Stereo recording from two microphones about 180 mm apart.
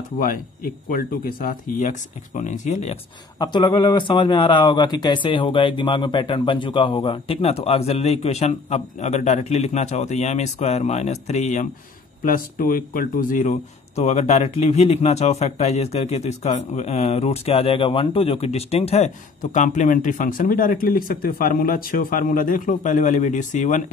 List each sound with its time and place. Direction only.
0.8 s speech: 50° left (ahead or behind)
3.3 s speech: 25° left (ahead or behind)
12.3 s speech: 50° left (ahead or behind)